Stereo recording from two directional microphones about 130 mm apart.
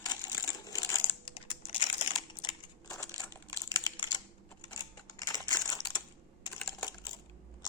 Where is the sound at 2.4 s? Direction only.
30° left (ahead or behind).